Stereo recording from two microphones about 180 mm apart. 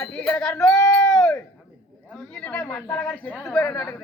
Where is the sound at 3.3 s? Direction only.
Centre (ahead or behind).